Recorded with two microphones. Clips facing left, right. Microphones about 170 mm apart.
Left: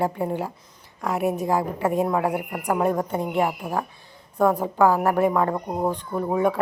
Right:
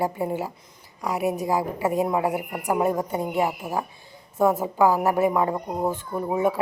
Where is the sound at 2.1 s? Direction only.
15° right (ahead or behind).